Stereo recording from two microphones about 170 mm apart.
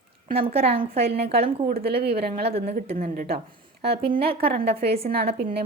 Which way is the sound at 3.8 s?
70° right (ahead or behind).